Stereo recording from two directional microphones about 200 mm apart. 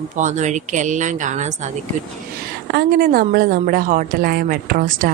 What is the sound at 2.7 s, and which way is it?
A woman's voice, 50° right (ahead or behind).